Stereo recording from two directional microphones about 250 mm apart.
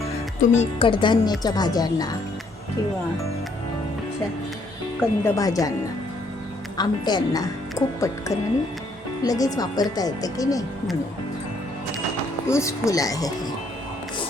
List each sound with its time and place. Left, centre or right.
0.3 s speech: left
4.9 s speech: centre
6.7 s speech: centre
12.5 s speech: centre